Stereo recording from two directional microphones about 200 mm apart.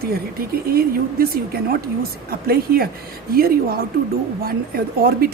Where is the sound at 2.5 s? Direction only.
50° right (ahead or behind).